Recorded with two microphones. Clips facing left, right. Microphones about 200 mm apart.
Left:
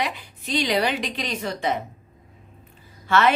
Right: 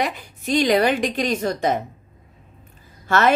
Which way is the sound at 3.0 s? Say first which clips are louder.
Right 1 dB; 45° right (ahead or behind).